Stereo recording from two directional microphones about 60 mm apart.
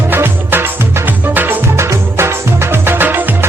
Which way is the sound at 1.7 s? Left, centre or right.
Right.